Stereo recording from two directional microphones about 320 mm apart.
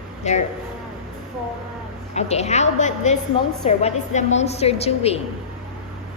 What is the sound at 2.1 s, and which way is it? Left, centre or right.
A woman's voice, left.